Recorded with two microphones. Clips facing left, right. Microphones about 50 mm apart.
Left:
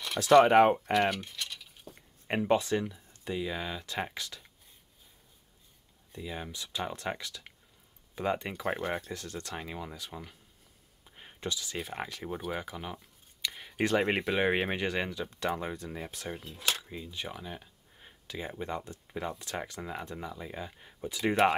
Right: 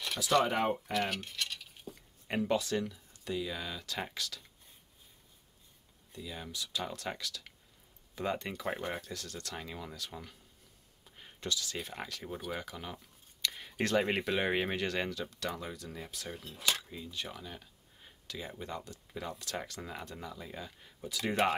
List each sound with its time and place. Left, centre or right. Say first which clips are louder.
0.2 s speech: left 9 dB; left
2.0 s speech: left 3 dB; left
6.1 s speech: left 3 dB; left
11.1 s a sound: left 1 dB; centre
11.9 s speech: left 4 dB; centre
13.8 s speech: left 3 dB; centre
15.2 s speech: left 6 dB; left